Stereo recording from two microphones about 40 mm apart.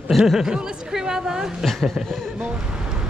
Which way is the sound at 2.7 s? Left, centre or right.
Centre.